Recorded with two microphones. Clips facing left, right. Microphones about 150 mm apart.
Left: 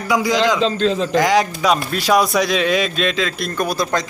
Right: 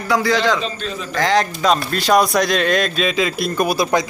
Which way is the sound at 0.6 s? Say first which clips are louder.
Left 9 dB; 90° left.